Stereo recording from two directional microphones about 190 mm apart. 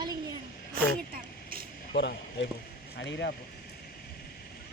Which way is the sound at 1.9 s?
65° left (ahead or behind).